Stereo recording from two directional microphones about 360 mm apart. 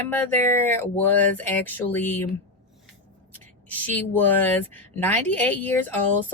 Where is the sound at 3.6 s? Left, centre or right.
Centre.